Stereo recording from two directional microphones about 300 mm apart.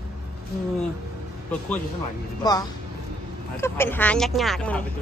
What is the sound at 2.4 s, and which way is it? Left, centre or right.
Speech, centre.